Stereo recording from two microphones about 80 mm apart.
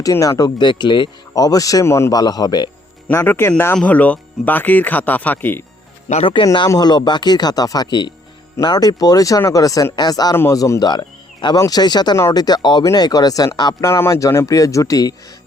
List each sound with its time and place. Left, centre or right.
0.0 s speech: left
0.6 s speech: left
1.3 s speech: left
2.1 s speech: left
3.1 s speech: left
3.8 s speech: centre
6.2 s speech: left
6.7 s speech: left
8.6 s speech: left
11.5 s speech: left
13.8 s speech: left